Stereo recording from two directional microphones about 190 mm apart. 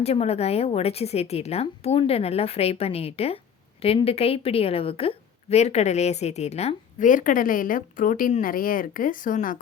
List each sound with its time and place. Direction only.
0.0 s a woman's voice: 35° left (ahead or behind)